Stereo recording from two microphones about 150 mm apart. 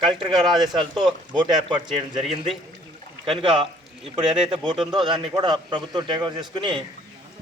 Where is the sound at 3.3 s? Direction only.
35° right (ahead or behind).